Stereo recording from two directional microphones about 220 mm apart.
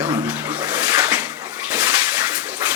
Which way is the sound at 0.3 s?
10° right (ahead or behind).